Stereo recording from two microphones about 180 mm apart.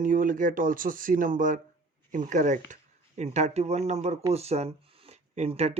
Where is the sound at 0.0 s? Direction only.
45° right (ahead or behind).